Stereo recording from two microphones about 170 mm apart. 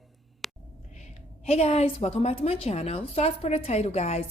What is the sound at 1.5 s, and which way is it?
A woman's voice, 35° left (ahead or behind).